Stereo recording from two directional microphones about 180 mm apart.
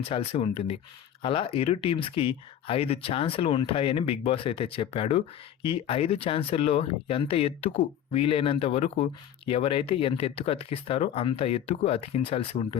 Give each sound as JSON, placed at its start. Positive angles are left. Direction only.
{"t": 0.1, "sound": "speech", "side_deg": 30}